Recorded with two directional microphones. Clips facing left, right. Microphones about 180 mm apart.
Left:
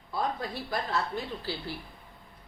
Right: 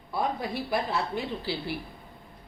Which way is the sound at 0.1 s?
10° right (ahead or behind).